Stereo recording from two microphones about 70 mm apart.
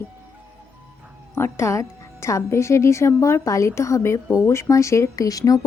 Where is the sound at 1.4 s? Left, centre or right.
Left.